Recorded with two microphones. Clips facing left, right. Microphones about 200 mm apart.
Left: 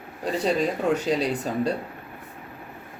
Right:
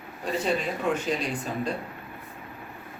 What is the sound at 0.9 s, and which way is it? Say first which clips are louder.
Speech: left 5 dB; 35° left (ahead or behind).